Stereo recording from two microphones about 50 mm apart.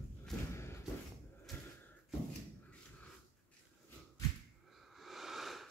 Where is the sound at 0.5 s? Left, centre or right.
Left.